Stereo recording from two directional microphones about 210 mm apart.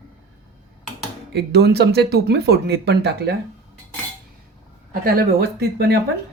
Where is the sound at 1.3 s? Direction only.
50° right (ahead or behind).